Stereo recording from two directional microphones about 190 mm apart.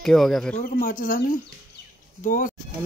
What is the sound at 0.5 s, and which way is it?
Speech, 45° left (ahead or behind).